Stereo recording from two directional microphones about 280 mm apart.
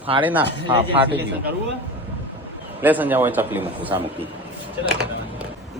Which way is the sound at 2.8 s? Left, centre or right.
Centre.